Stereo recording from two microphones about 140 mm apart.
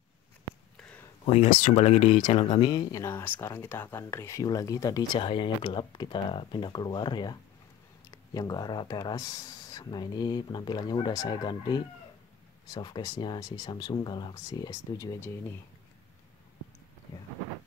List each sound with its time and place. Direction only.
0.7 s a sound: 5° left (ahead or behind)
1.3 s speech: 60° left (ahead or behind)
2.5 s speech: 30° left (ahead or behind)
5.2 s speech: 40° left (ahead or behind); by 15.5 s 15° left (ahead or behind)